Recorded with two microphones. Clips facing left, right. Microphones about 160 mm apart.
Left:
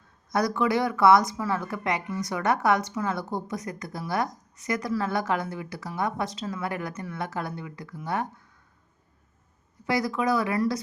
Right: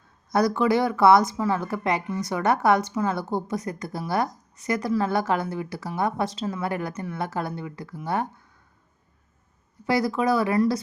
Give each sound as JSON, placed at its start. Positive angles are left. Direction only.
{"t": 0.3, "sound": "speech", "side_deg": -30}
{"t": 9.8, "sound": "speech", "side_deg": -30}